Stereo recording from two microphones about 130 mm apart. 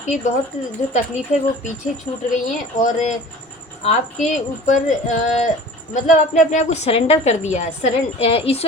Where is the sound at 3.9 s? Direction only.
70° left (ahead or behind); by 8.6 s 50° left (ahead or behind).